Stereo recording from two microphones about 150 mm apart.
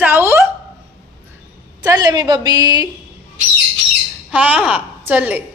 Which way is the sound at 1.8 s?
25° right (ahead or behind).